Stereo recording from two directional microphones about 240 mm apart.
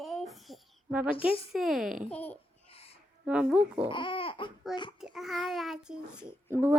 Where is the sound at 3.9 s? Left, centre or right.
Left.